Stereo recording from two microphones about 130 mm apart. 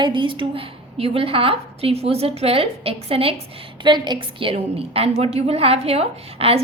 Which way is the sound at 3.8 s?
35° right (ahead or behind).